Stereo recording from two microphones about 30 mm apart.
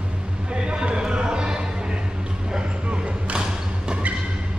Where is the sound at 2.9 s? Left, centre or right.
Right.